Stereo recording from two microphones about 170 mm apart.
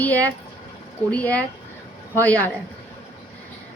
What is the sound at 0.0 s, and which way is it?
A woman's voice, 10° left (ahead or behind).